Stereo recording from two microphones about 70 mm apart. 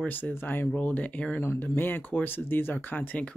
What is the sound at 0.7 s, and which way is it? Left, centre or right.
Speech, left.